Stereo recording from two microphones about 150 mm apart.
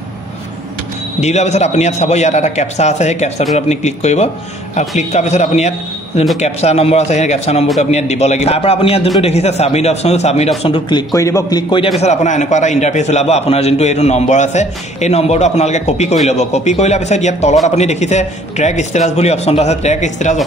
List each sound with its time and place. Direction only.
1.2 s a man's voice: 50° left (ahead or behind)
10.6 s a man's voice: 35° left (ahead or behind)
12.0 s a man's voice: 50° left (ahead or behind)